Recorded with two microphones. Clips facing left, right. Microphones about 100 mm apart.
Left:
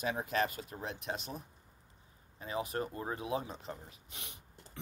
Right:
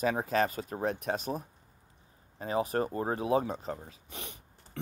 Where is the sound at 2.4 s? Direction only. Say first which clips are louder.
Right 7 dB; 40° right (ahead or behind).